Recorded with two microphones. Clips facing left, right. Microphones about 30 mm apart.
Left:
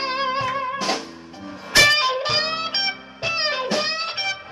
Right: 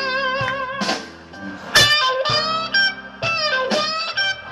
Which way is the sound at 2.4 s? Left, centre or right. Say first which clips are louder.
Right 5 dB; right.